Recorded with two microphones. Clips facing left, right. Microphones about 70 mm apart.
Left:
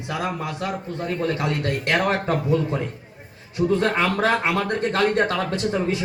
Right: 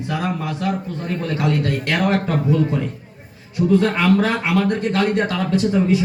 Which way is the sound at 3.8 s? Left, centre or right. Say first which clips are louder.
Right 3 dB; left.